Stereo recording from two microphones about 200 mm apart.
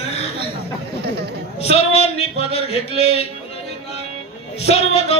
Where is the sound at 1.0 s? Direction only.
55° right (ahead or behind).